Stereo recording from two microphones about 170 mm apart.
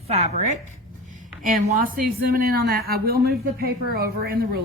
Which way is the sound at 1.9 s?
60° right (ahead or behind).